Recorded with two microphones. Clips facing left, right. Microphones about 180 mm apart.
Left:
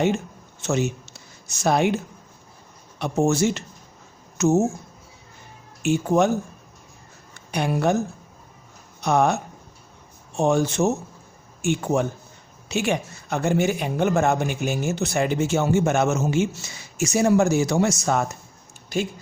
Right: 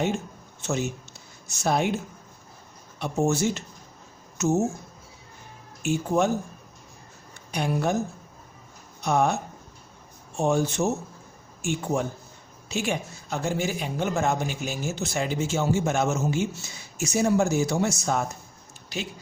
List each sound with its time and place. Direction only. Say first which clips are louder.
0.6 s speech: left 5 dB; 80° left
3.0 s speech: left 4 dB; 80° left
5.8 s speech: left 4 dB; 70° left (ahead or behind)
7.5 s speech: left 4 dB; 65° left (ahead or behind)
9.0 s speech: left 3 dB; 70° left (ahead or behind)
10.3 s a man's voice: left 3 dB; 75° left (ahead or behind)
18.9 s speech: left 8 dB; 50° left (ahead or behind)